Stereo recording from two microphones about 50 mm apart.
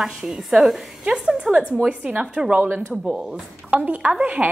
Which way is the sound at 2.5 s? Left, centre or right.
Right.